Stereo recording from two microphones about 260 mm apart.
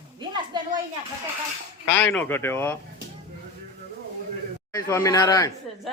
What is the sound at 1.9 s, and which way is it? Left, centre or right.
Speech, centre.